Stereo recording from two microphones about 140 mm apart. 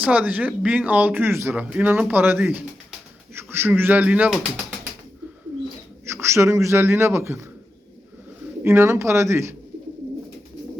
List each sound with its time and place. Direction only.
0.0 s speech: 10° right (ahead or behind)
6.1 s a man's voice: 20° right (ahead or behind)
8.6 s a man's voice: 15° right (ahead or behind)